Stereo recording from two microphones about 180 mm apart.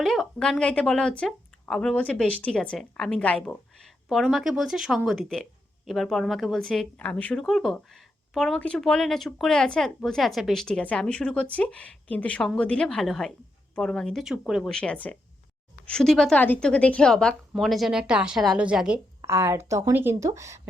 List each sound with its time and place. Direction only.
0.0 s speech: centre (ahead or behind); by 20.6 s 15° right (ahead or behind)